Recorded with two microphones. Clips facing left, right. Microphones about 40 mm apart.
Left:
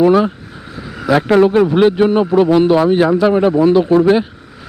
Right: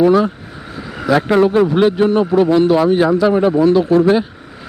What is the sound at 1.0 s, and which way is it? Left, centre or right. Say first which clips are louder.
Speech: left 1 dB; centre.